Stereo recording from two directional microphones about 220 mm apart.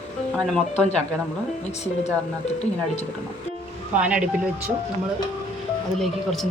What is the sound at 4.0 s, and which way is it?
Speech, 5° right (ahead or behind).